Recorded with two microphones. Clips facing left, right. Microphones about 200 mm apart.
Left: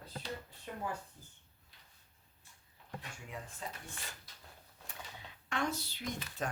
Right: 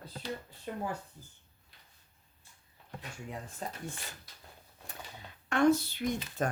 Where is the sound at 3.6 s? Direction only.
45° right (ahead or behind).